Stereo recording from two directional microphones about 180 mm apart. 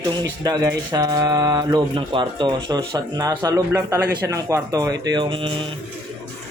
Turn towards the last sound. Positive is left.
turn(degrees=-25)  # may be behind; listen again after turning